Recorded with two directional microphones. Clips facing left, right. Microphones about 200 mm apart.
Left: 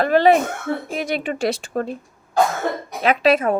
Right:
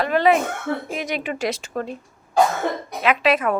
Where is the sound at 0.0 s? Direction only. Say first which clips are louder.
Left 3 dB; 35° left (ahead or behind).